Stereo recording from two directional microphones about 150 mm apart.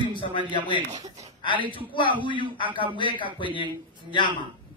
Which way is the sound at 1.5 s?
35° right (ahead or behind).